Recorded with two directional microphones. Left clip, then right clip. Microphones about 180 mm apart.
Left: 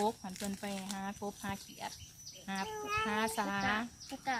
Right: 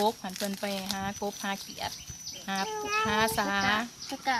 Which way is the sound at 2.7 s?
5° left (ahead or behind).